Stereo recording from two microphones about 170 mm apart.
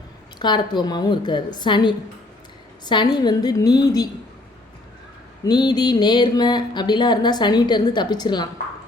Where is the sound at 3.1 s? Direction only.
25° left (ahead or behind).